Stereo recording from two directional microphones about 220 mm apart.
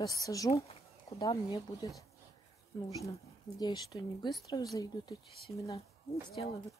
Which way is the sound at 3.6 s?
20° left (ahead or behind).